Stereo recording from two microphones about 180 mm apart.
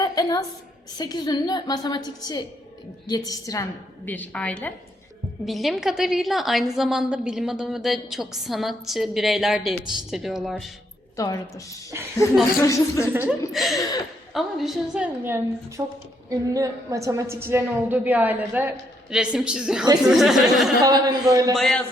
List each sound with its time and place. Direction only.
0.0 s a sound: 20° left (ahead or behind)
0.9 s a woman's voice: 20° left (ahead or behind); by 10.7 s centre (ahead or behind)
11.2 s a woman's voice: 20° left (ahead or behind)
13.5 s a woman's voice: centre (ahead or behind)
20.8 s a man's voice: 20° right (ahead or behind)
21.5 s a woman's voice: 5° left (ahead or behind)